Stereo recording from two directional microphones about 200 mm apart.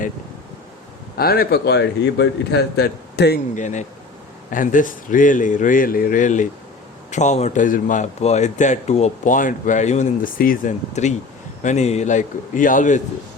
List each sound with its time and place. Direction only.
1.1 s a man's voice: 50° left (ahead or behind)
3.5 s a man's voice: 35° left (ahead or behind)